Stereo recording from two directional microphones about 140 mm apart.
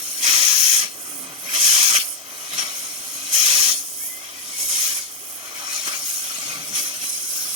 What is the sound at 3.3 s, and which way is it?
Hiss, 40° right (ahead or behind).